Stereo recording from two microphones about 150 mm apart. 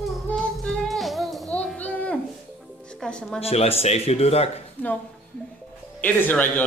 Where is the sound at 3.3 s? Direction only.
40° left (ahead or behind).